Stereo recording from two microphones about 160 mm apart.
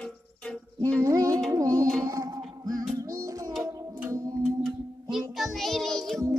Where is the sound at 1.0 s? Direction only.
20° right (ahead or behind).